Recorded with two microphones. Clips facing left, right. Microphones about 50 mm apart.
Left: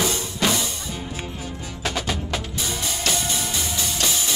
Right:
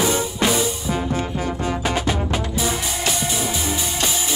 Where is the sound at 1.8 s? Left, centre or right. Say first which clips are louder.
Even; centre.